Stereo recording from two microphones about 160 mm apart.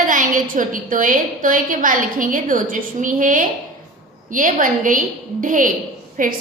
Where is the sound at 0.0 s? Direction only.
55° right (ahead or behind).